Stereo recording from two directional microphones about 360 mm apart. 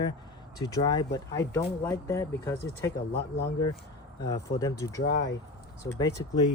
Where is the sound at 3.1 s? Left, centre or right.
Left.